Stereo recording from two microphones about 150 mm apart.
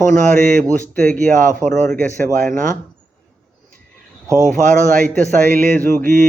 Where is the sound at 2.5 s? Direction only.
60° right (ahead or behind).